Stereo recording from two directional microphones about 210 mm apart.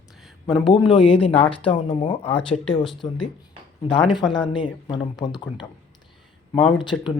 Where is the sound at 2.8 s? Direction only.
Centre (ahead or behind).